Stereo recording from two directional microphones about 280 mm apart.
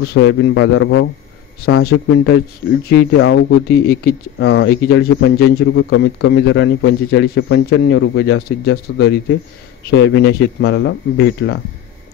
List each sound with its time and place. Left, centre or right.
0.0 s speech: left